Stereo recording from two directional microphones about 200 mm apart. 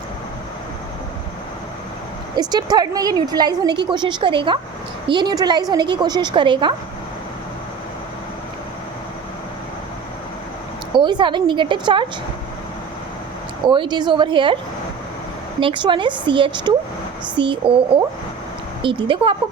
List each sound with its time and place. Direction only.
2.3 s a woman's voice: 20° right (ahead or behind)
10.9 s a woman's voice: 25° right (ahead or behind)
13.7 s a woman's voice: 20° right (ahead or behind)
15.6 s a woman's voice: 25° right (ahead or behind)